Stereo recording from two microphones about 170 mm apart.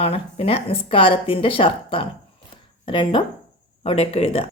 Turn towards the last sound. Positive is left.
turn(degrees=35)  # may be behind; listen again after turning